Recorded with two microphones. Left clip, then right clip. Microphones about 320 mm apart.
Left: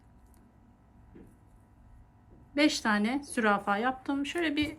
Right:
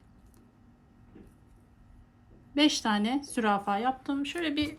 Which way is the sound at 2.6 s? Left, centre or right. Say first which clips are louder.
Right 1 dB; centre.